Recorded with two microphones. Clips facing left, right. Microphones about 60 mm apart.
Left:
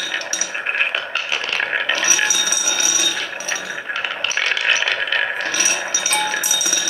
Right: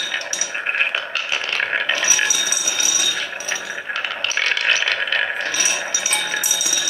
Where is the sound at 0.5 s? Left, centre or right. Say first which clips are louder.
Even; centre.